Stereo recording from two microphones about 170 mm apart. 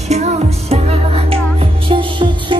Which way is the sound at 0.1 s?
40° right (ahead or behind).